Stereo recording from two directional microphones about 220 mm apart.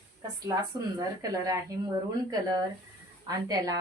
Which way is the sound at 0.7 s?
15° right (ahead or behind).